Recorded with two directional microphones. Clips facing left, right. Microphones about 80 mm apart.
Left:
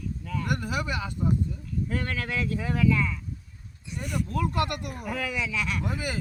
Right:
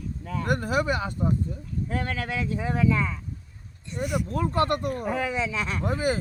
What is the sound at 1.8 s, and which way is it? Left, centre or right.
Speech, centre.